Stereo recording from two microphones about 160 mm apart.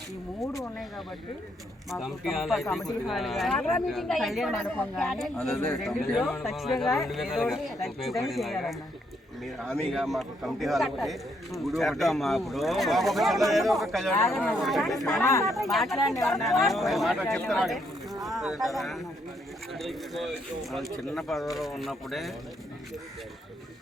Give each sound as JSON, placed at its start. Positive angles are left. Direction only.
{"t": 0.4, "sound": "speech", "side_deg": 20}
{"t": 1.9, "sound": "a man's voice", "side_deg": 0}
{"t": 15.2, "sound": "speech", "side_deg": 15}
{"t": 15.7, "sound": "a man's voice", "side_deg": 0}